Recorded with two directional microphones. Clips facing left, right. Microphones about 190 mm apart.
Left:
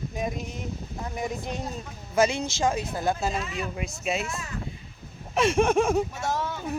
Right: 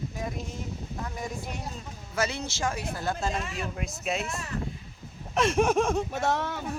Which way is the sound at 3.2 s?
5° left (ahead or behind).